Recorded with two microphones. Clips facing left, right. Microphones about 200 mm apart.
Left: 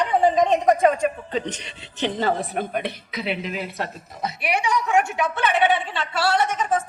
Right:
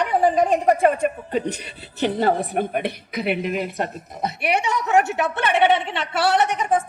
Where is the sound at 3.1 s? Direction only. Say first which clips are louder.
Right 5 dB; 55° right (ahead or behind).